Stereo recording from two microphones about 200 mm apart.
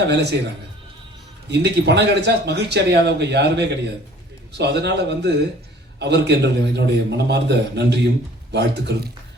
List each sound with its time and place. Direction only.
0.0 s speech: 60° right (ahead or behind)
1.5 s speech: 60° right (ahead or behind)